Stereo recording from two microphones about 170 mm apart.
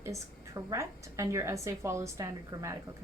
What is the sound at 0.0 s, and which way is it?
A woman's voice, 20° right (ahead or behind).